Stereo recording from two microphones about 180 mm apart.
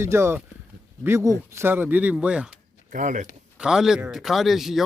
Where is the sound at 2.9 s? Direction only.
45° right (ahead or behind).